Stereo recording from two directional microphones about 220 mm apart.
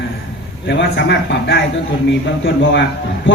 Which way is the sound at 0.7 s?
55° left (ahead or behind).